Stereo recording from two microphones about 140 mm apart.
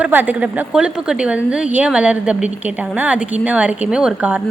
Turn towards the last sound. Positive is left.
turn(degrees=-10)  # may be behind; listen again after turning